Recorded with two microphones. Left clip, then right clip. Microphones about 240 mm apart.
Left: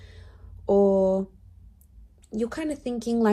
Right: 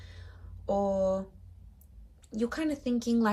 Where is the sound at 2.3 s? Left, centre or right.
Left.